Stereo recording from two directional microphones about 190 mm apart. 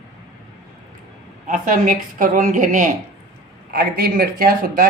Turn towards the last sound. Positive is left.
turn(degrees=-50)  # may be behind; listen again after turning